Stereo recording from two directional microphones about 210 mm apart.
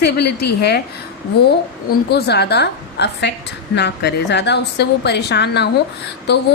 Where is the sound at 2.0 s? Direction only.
50° left (ahead or behind).